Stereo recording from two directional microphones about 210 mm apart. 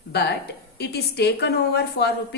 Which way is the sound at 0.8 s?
50° left (ahead or behind).